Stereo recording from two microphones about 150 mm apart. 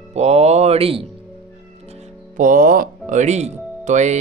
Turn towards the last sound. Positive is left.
turn(degrees=-50)  # may be behind; listen again after turning